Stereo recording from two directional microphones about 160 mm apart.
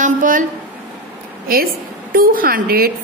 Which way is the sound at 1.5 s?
70° right (ahead or behind).